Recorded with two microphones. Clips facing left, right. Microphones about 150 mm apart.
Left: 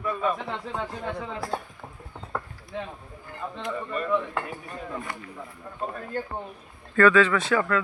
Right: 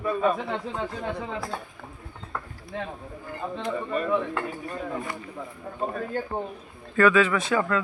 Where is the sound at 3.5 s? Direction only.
40° right (ahead or behind).